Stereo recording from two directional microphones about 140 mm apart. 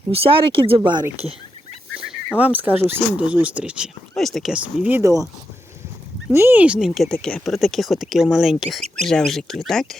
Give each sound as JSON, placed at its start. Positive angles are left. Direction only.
{"t": 0.1, "sound": "speech", "side_deg": -40}
{"t": 2.4, "sound": "speech", "side_deg": -10}
{"t": 6.3, "sound": "speech", "side_deg": -15}